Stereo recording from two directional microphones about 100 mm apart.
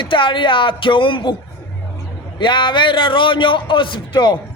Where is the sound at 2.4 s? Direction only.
50° left (ahead or behind).